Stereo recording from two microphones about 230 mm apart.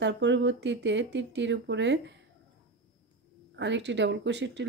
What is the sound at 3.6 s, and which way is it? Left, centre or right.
Speech, right.